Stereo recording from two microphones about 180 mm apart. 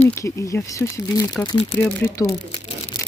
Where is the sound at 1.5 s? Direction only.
30° left (ahead or behind).